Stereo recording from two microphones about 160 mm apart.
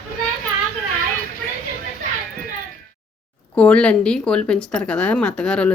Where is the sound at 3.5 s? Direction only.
10° left (ahead or behind).